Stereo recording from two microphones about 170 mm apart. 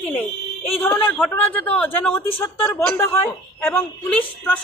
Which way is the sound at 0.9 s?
10° left (ahead or behind).